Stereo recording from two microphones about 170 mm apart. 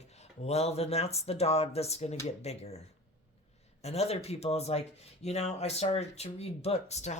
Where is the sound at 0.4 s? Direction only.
40° left (ahead or behind).